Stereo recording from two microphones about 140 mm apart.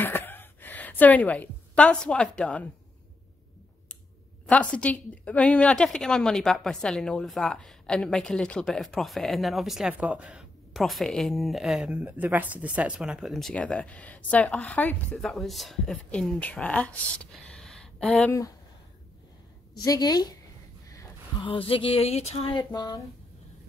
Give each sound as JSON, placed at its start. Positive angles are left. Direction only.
{"t": 0.0, "sound": "a sound", "side_deg": 15}
{"t": 4.5, "sound": "a woman's voice", "side_deg": 10}
{"t": 19.8, "sound": "a woman's voice", "side_deg": 25}
{"t": 21.4, "sound": "speech", "side_deg": 40}
{"t": 22.5, "sound": "a woman's voice", "side_deg": 30}